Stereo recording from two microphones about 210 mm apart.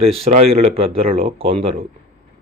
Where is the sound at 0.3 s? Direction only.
30° right (ahead or behind).